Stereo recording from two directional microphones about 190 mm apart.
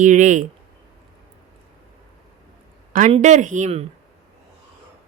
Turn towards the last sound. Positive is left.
turn(degrees=-35)  # may be behind; listen again after turning